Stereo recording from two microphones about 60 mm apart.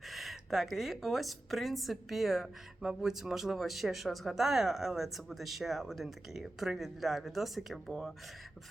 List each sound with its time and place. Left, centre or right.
0.0 s a woman's voice: centre